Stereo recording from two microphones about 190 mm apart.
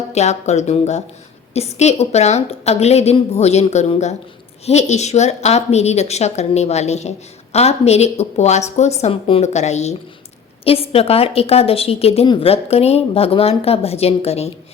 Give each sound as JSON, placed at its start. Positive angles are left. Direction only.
{"t": 0.1, "sound": "a woman's voice", "side_deg": 35}